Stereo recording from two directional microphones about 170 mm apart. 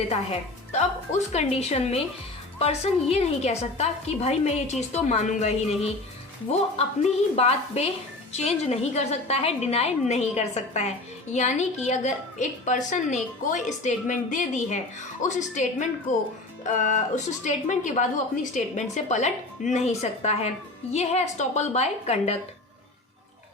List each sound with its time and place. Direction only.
0.1 s a woman's voice: 40° left (ahead or behind)